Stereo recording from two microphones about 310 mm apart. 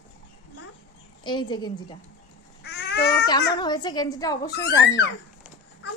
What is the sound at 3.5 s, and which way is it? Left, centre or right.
Speech, centre.